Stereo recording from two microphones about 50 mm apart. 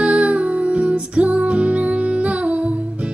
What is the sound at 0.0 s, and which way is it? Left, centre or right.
Music, right.